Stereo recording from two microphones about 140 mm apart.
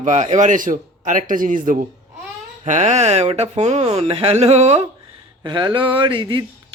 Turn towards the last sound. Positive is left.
turn(degrees=-35)  # may be behind; listen again after turning